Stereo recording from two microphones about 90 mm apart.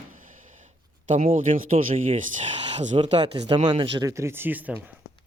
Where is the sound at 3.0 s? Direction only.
65° right (ahead or behind).